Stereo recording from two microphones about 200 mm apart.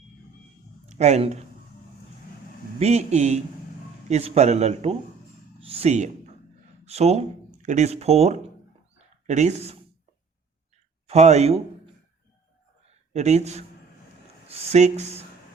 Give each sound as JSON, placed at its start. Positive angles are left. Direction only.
{"t": 0.9, "sound": "speech", "side_deg": -35}
{"t": 2.7, "sound": "a man's voice", "side_deg": -35}
{"t": 9.0, "sound": "a sound", "side_deg": -35}
{"t": 11.0, "sound": "speech", "side_deg": -35}
{"t": 13.1, "sound": "a man's voice", "side_deg": -35}